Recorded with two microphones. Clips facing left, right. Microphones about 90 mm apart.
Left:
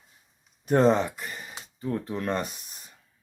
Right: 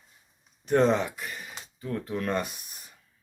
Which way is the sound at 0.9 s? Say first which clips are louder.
Left 1 dB; centre (ahead or behind).